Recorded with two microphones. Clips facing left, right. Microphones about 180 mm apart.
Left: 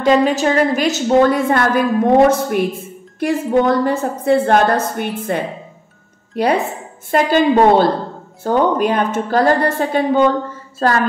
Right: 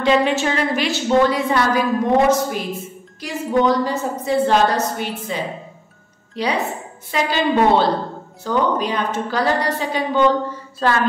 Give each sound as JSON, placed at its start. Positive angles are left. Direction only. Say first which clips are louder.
{"t": 0.0, "sound": "a woman's voice", "louder": "left 3 dB", "side_deg": 40}
{"t": 6.3, "sound": "a woman's voice", "louder": "left 5 dB", "side_deg": 55}